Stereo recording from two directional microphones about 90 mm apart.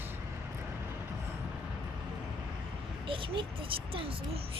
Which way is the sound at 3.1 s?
75° right (ahead or behind).